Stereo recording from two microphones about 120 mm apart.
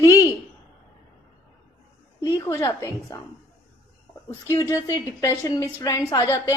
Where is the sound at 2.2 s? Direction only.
25° left (ahead or behind).